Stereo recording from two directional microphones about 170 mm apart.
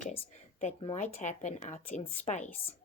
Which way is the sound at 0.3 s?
35° left (ahead or behind).